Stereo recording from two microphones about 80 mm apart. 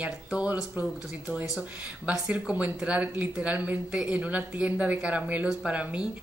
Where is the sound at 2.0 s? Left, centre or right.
Centre.